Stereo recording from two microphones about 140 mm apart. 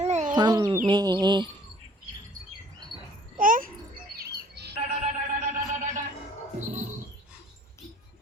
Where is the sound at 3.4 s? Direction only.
75° right (ahead or behind).